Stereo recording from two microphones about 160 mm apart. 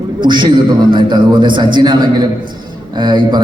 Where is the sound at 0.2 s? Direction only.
30° right (ahead or behind).